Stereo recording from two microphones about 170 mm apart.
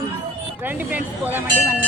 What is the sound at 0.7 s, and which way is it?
Speech, 10° right (ahead or behind).